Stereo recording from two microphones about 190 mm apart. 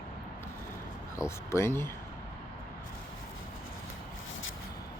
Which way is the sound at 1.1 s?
15° left (ahead or behind).